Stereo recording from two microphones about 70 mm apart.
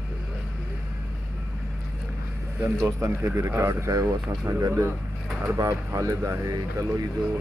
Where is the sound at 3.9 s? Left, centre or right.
Right.